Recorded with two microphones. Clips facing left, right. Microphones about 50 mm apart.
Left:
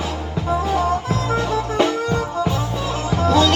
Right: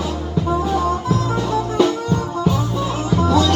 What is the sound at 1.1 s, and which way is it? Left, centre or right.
Music, left.